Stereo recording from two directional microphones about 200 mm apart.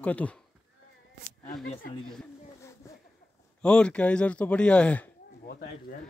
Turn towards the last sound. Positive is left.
turn(degrees=50)  # may be behind; listen again after turning